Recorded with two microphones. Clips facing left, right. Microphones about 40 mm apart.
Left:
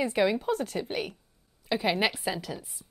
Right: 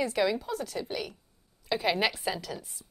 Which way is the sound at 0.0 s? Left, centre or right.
Left.